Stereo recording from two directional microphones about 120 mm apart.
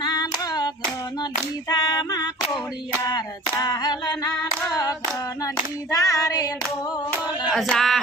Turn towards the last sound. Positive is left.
turn(degrees=5)  # may be behind; listen again after turning